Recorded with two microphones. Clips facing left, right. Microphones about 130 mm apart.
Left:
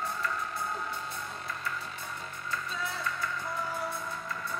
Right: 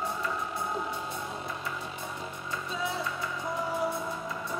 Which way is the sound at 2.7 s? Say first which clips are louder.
Right 6 dB; 15° right (ahead or behind).